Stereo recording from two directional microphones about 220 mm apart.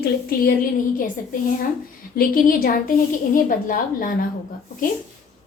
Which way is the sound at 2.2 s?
40° left (ahead or behind).